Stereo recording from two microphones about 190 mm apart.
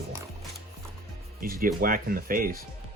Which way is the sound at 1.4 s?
50° right (ahead or behind).